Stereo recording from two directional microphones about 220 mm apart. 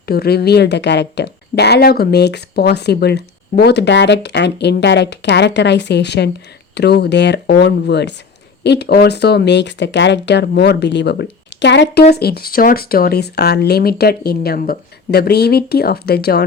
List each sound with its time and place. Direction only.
0.0 s speech: 45° left (ahead or behind)